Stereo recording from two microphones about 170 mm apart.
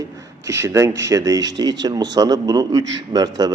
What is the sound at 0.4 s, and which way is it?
A man's voice, 15° right (ahead or behind).